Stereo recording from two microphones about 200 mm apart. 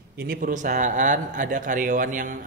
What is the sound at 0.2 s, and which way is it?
A man's voice, 45° right (ahead or behind).